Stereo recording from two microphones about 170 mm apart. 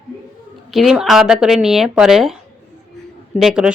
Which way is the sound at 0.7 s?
5° right (ahead or behind).